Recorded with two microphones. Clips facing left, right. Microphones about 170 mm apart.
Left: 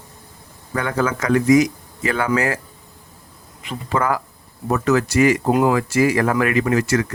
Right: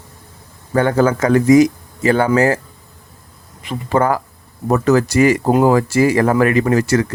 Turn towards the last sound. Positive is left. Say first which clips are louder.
# right 4 dB
turn(degrees=-35)  # may be behind; listen again after turning